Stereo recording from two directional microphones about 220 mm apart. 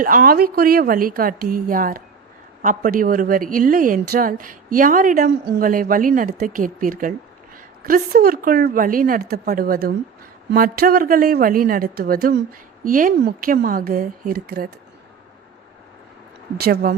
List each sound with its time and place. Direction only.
0.0 s a woman's voice: 40° right (ahead or behind)
16.6 s speech: 45° right (ahead or behind)